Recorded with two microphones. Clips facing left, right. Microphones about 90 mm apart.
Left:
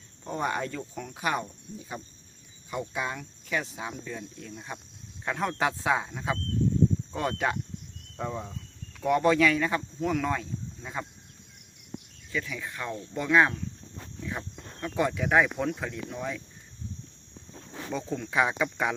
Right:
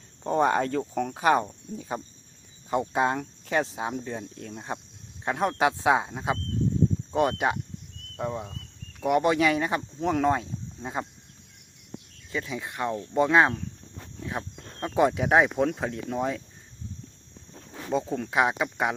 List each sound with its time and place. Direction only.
0.3 s speech: 45° right (ahead or behind)
5.2 s speech: 35° right (ahead or behind)
12.3 s speech: 25° right (ahead or behind)
17.9 s speech: 30° right (ahead or behind)
18.3 s speech: 20° right (ahead or behind)